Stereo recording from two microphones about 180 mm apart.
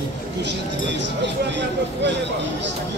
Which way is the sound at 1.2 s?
75° right (ahead or behind).